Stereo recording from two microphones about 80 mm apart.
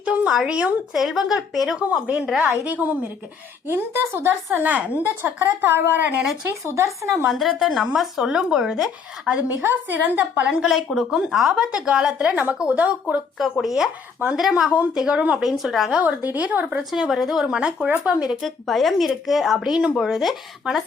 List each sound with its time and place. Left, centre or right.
0.0 s a sound: centre
0.3 s speech: centre
1.9 s speech: centre
6.7 s speech: right
7.3 s speech: centre
9.5 s speech: right
13.4 s speech: centre
15.4 s speech: centre
16.0 s speech: right
16.9 s speech: centre
18.4 s speech: centre